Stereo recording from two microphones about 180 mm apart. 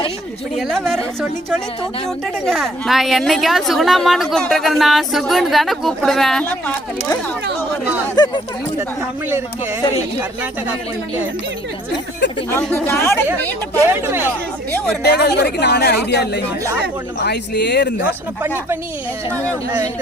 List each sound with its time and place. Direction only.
0.5 s a woman's voice: centre (ahead or behind)
2.4 s a woman's voice: centre (ahead or behind)
8.1 s speech: 25° left (ahead or behind)
12.5 s speech: 10° left (ahead or behind)
13.7 s speech: 15° right (ahead or behind)
15.0 s speech: 65° left (ahead or behind)
19.3 s speech: 10° left (ahead or behind)